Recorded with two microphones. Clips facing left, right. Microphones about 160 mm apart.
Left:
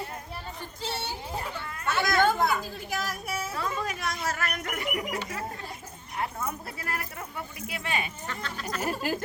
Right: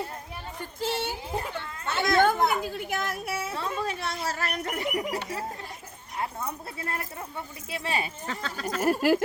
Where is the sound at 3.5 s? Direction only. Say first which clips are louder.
Right 1 dB; 30° right (ahead or behind).